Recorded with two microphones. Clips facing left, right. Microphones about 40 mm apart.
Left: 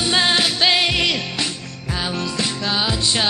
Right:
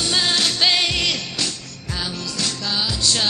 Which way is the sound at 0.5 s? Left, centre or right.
Centre.